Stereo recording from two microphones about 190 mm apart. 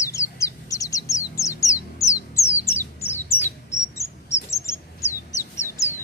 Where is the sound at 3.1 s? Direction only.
10° left (ahead or behind).